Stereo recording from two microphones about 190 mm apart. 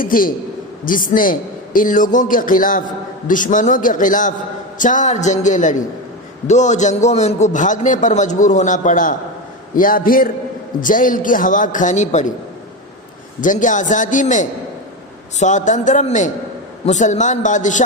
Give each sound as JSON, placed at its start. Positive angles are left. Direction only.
{"t": 0.0, "sound": "a man's voice", "side_deg": 50}
{"t": 13.4, "sound": "a man's voice", "side_deg": 45}